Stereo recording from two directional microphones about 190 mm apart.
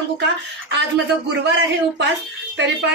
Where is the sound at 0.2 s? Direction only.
70° right (ahead or behind).